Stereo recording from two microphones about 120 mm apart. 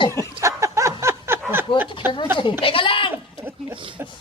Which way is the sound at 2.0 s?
20° right (ahead or behind).